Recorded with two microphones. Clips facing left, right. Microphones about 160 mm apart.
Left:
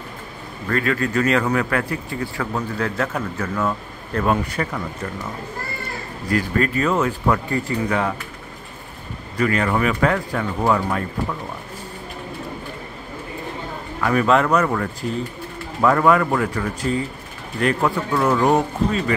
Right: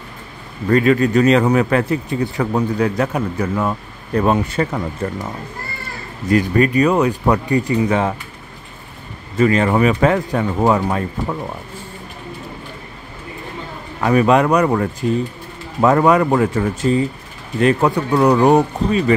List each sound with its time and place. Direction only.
0.7 s a man's voice: 20° right (ahead or behind)
5.0 s speech: 35° right (ahead or behind)
6.2 s a man's voice: 20° right (ahead or behind)
9.4 s a man's voice: 25° right (ahead or behind)
14.0 s a man's voice: 15° right (ahead or behind)